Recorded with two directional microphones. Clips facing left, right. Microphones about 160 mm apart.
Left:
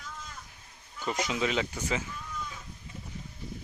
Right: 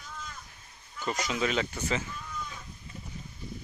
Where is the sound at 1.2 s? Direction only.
15° left (ahead or behind).